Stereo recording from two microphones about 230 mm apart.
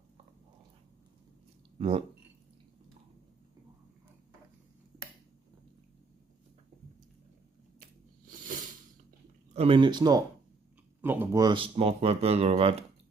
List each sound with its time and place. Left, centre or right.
1.8 s speech: right
8.3 s a sound: right
9.5 s speech: right